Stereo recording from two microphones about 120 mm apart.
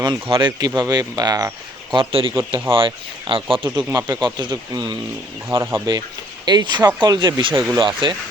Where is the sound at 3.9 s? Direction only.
35° right (ahead or behind).